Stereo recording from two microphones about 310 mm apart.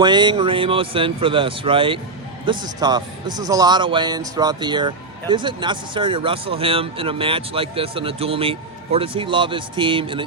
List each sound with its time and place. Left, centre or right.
0.0 s a man's voice: centre